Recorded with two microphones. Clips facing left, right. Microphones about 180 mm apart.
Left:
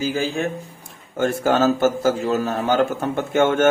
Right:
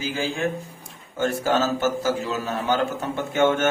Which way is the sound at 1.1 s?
55° left (ahead or behind).